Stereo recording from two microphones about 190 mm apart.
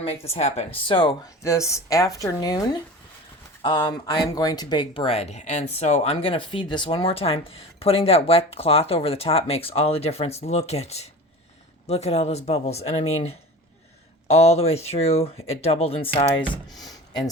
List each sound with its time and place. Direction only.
0.0 s speech: 30° left (ahead or behind)
16.5 s speech: centre (ahead or behind)